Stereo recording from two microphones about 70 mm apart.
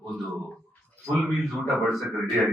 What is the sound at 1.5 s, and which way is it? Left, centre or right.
Speech, centre.